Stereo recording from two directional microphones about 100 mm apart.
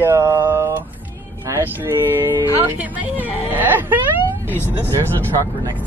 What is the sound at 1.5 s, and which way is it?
Speech, 30° right (ahead or behind).